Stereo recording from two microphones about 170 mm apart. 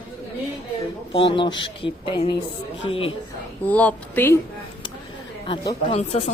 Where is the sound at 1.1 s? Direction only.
30° left (ahead or behind).